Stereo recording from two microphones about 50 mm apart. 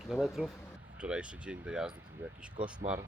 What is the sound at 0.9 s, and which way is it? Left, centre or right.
Speech, right.